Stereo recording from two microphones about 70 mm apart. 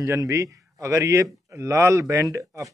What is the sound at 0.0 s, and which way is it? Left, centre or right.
Speech, right.